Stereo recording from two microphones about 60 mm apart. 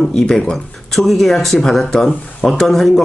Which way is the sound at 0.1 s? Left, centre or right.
Centre.